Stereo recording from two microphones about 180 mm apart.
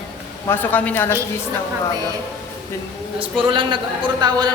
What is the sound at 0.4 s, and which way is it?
Speech, 10° left (ahead or behind).